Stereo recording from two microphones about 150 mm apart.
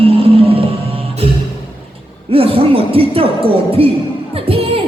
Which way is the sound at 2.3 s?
40° right (ahead or behind).